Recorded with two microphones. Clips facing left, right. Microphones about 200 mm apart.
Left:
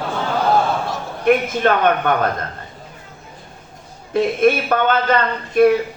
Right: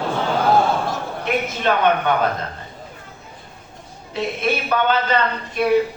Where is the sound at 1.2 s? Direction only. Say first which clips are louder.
Left 7 dB; 50° left (ahead or behind).